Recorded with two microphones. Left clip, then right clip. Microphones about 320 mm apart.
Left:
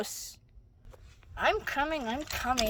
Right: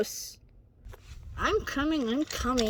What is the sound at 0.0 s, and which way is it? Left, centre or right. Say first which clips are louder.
Speech: right 6 dB; centre.